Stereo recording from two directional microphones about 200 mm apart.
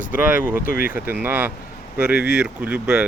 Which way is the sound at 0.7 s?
45° left (ahead or behind).